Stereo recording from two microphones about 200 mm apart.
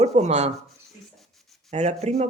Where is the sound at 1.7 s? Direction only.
35° right (ahead or behind).